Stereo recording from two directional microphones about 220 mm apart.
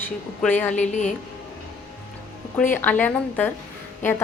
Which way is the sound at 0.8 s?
30° left (ahead or behind).